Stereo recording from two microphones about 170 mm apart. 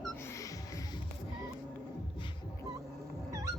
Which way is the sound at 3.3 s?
20° right (ahead or behind).